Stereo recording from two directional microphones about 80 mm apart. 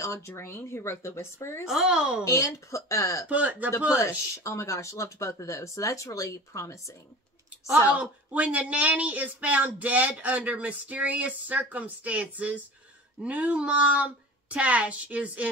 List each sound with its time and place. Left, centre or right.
0.0 s speech: left
1.7 s speech: centre
2.2 s speech: left
3.3 s speech: centre
4.0 s speech: left
8.0 s speech: centre